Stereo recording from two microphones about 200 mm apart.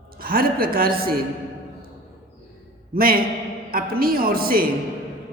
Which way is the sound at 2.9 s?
45° right (ahead or behind).